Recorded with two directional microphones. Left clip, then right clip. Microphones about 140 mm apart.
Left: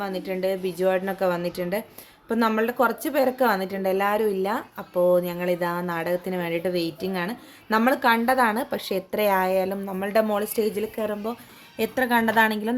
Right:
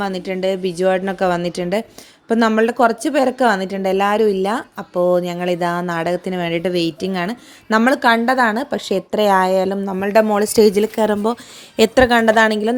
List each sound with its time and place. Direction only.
0.0 s a woman's voice: 45° right (ahead or behind); by 10.4 s 30° right (ahead or behind)
10.4 s speech: 55° right (ahead or behind)
12.3 s a woman's voice: 35° right (ahead or behind)